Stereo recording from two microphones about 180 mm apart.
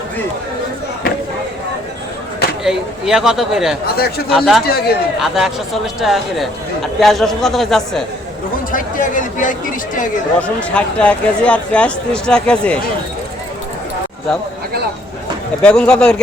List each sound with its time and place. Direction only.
2.6 s speech: 5° right (ahead or behind)
3.8 s a man's voice: 60° left (ahead or behind)
4.3 s speech: centre (ahead or behind)
4.6 s a man's voice: 60° left (ahead or behind)
5.2 s speech: centre (ahead or behind)
8.7 s speech: 45° left (ahead or behind)
10.3 s speech: 5° left (ahead or behind)
15.6 s speech: 5° left (ahead or behind)